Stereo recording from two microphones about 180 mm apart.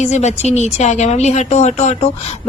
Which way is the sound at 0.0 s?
40° left (ahead or behind).